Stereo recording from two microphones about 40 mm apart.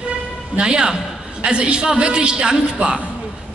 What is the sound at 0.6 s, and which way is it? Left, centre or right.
A woman's voice, right.